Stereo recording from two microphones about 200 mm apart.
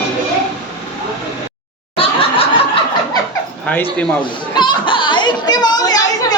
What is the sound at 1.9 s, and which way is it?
Snicker, 30° left (ahead or behind).